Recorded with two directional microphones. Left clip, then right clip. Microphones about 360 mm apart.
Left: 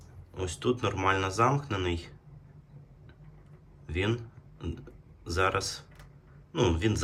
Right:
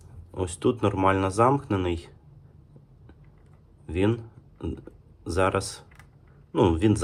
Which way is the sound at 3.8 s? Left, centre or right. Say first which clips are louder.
Right 6 dB; centre.